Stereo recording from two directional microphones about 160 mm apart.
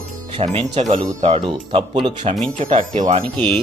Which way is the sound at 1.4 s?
30° right (ahead or behind).